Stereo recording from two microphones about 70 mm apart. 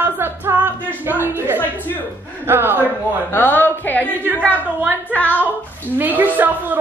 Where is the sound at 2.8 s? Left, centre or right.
Left.